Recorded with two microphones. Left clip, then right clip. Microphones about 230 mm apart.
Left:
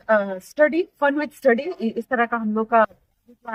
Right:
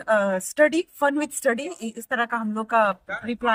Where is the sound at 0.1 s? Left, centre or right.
Right.